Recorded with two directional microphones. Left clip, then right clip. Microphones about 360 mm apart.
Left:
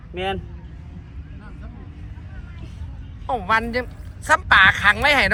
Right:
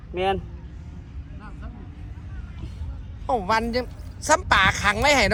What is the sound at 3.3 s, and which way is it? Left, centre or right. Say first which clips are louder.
A woman's voice: left 2 dB; centre.